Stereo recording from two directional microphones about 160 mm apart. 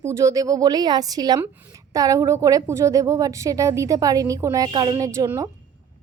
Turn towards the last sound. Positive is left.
turn(degrees=-20)  # may be behind; listen again after turning